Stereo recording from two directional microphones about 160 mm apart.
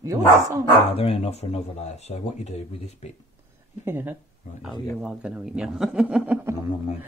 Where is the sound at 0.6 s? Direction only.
35° left (ahead or behind).